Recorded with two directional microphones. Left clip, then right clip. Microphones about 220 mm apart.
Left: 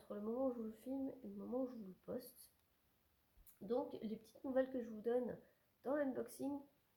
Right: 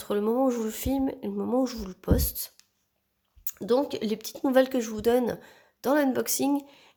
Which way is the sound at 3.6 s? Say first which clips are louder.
Right 18 dB; 45° right (ahead or behind).